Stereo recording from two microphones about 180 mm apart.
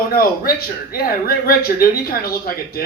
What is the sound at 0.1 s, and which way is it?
Speech, 55° left (ahead or behind).